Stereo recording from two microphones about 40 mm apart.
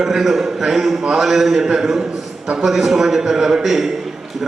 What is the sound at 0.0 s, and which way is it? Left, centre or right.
A man's voice, centre.